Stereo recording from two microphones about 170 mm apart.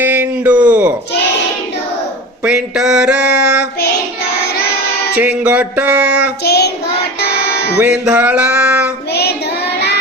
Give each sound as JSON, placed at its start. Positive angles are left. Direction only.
{"t": 0.0, "sound": "a sound", "side_deg": -10}
{"t": 2.4, "sound": "a sound", "side_deg": -5}
{"t": 5.1, "sound": "music", "side_deg": -10}
{"t": 6.4, "sound": "child singing", "side_deg": 70}
{"t": 7.2, "sound": "music", "side_deg": 70}
{"t": 7.8, "sound": "music", "side_deg": -10}
{"t": 9.7, "sound": "child singing", "side_deg": 80}